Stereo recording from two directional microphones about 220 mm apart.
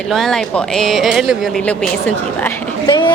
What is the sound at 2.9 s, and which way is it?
Speech, 20° left (ahead or behind).